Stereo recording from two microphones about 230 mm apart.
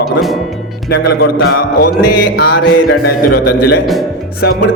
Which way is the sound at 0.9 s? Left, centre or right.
Left.